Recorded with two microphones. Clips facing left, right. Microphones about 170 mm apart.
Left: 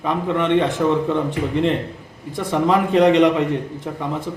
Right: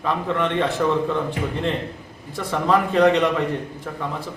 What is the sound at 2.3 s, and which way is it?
A man's voice, 20° left (ahead or behind).